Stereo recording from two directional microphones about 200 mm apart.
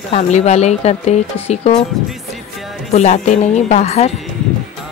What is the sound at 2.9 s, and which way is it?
Speech, 35° left (ahead or behind).